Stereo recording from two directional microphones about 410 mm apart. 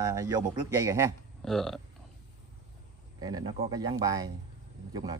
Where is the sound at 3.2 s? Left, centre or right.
Centre.